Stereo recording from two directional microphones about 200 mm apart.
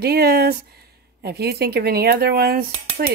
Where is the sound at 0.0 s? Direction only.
50° right (ahead or behind).